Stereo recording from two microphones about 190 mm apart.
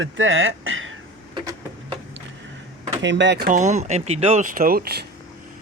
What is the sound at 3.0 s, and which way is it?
Speech, 70° right (ahead or behind).